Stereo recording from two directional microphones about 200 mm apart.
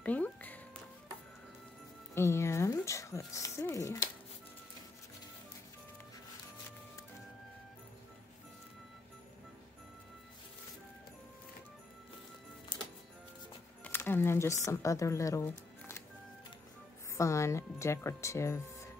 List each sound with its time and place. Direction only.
0.0 s music: 10° left (ahead or behind)
2.1 s music: 15° left (ahead or behind)
12.7 s music: 20° left (ahead or behind)
13.8 s speech: 10° left (ahead or behind)
17.2 s speech: 15° left (ahead or behind)